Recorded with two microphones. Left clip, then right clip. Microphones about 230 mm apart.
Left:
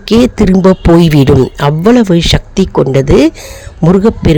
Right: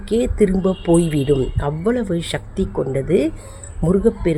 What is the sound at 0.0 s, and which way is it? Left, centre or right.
Speech, left.